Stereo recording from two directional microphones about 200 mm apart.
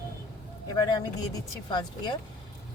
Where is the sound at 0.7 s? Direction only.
20° left (ahead or behind).